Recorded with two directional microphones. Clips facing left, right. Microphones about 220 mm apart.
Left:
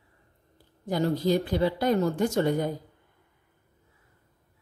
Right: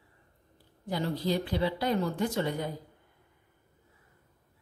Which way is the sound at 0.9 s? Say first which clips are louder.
Left 6 dB; 45° left (ahead or behind).